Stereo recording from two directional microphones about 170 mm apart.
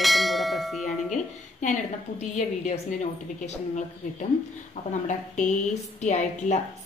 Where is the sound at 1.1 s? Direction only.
45° left (ahead or behind).